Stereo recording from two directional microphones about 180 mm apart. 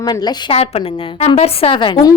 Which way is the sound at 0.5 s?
35° left (ahead or behind).